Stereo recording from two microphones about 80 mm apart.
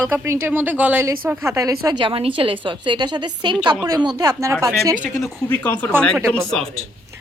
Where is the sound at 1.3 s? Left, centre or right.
Right.